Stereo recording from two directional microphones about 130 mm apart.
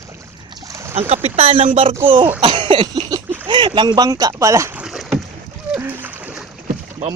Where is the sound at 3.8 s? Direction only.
35° right (ahead or behind).